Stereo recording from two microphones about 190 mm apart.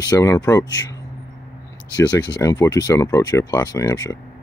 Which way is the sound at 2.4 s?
15° left (ahead or behind).